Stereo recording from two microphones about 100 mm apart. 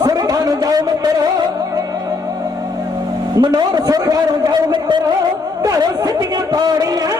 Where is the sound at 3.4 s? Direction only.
45° right (ahead or behind).